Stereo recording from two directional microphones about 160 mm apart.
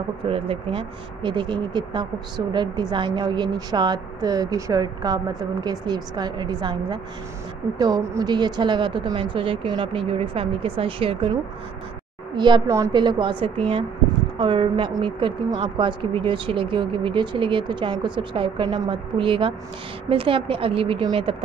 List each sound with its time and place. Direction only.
0.3 s speech: 35° right (ahead or behind)
12.4 s speech: 30° right (ahead or behind)
12.9 s speech: 30° right (ahead or behind)